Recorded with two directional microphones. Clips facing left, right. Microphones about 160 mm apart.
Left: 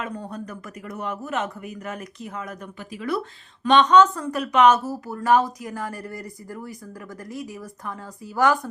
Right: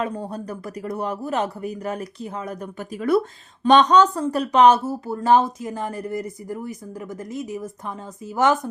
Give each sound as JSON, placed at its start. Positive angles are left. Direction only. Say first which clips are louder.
{"t": 0.0, "sound": "speech", "louder": "right 5 dB", "side_deg": -30}